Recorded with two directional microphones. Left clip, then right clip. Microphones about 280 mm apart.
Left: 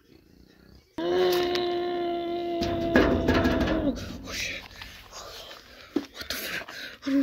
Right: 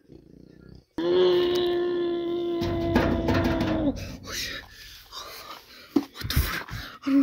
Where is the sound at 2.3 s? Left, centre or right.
Centre.